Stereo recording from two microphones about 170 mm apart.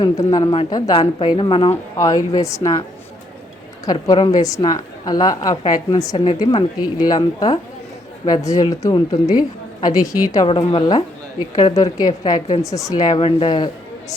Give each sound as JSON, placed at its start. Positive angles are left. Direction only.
{"t": 0.0, "sound": "a woman's voice", "side_deg": 25}
{"t": 1.7, "sound": "a woman's voice", "side_deg": 20}
{"t": 3.8, "sound": "a woman's voice", "side_deg": 25}